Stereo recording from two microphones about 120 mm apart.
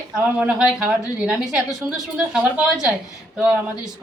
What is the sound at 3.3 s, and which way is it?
Speech, 10° right (ahead or behind).